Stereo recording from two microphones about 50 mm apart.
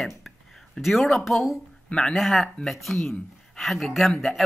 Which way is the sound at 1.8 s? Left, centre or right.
Centre.